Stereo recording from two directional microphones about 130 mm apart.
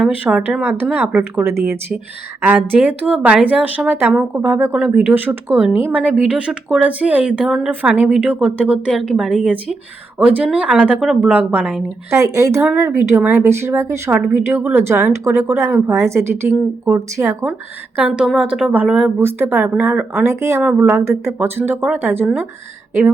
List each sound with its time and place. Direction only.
0.0 s speech: 5° right (ahead or behind)
12.1 s speech: 25° right (ahead or behind)
18.0 s speech: 5° right (ahead or behind)